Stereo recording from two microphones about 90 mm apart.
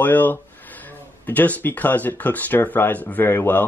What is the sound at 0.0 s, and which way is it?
Speech, 20° left (ahead or behind).